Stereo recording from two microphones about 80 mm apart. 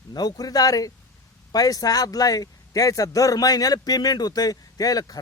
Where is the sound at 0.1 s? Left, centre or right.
Left.